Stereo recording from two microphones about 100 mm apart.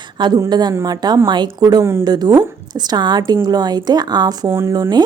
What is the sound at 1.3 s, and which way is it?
Speech, 45° right (ahead or behind).